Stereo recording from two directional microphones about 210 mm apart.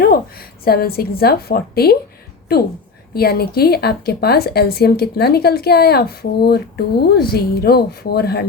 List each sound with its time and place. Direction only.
0.6 s a woman's voice: 45° left (ahead or behind)